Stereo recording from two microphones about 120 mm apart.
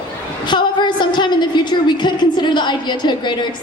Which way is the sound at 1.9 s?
40° left (ahead or behind).